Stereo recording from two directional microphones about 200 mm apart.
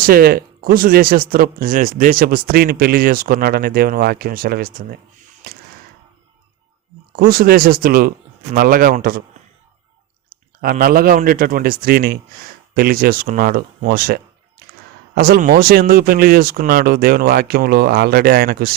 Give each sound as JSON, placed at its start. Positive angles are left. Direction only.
{"t": 0.0, "sound": "speech", "side_deg": -50}
{"t": 5.4, "sound": "a sound", "side_deg": -50}
{"t": 7.2, "sound": "speech", "side_deg": -45}
{"t": 10.6, "sound": "speech", "side_deg": -45}